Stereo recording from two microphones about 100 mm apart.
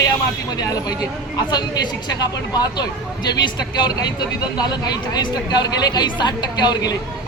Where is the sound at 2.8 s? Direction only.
45° left (ahead or behind).